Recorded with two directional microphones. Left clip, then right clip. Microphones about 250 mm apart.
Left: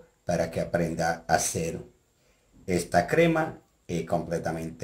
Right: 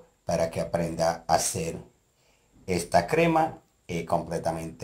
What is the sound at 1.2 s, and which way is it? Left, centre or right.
Speech, centre.